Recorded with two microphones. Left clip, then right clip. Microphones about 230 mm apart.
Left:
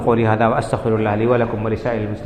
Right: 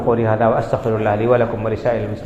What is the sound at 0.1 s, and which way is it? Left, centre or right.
A man's voice, left.